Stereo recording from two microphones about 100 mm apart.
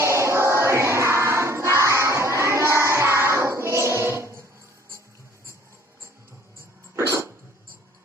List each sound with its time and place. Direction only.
0.0 s music: 30° right (ahead or behind)
6.9 s dog: 30° right (ahead or behind)